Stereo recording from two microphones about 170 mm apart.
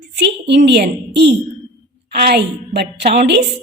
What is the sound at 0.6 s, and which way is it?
Speech, 80° right.